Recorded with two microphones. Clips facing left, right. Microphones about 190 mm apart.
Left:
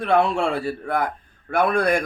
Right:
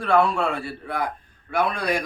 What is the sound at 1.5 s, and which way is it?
Speech, 55° left (ahead or behind).